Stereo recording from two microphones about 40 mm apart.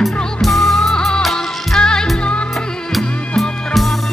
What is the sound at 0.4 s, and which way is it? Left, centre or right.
Music, centre.